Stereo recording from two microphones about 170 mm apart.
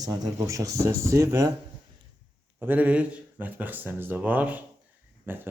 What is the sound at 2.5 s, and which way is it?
Speech, 10° right (ahead or behind).